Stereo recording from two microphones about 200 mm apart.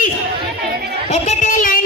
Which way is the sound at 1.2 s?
40° left (ahead or behind).